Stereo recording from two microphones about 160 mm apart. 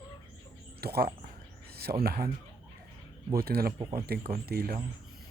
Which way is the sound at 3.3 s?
70° right (ahead or behind).